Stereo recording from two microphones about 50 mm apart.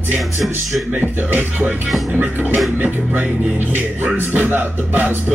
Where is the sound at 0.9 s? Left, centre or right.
Right.